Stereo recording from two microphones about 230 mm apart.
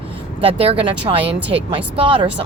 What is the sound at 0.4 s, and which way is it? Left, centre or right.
Speech, right.